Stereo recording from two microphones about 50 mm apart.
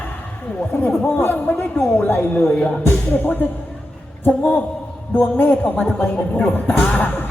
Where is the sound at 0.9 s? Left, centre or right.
Centre.